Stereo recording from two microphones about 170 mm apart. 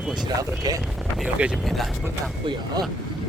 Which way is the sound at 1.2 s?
5° right (ahead or behind).